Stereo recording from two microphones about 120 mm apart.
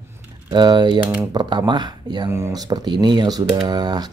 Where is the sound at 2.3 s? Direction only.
25° right (ahead or behind).